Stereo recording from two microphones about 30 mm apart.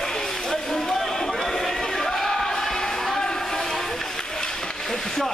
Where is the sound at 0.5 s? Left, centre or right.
Centre.